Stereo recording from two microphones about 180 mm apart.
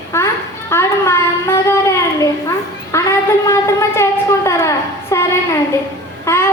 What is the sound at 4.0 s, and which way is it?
Child singing, 15° left (ahead or behind).